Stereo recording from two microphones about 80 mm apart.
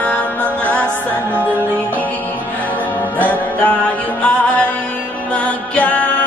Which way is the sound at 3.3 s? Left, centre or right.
Left.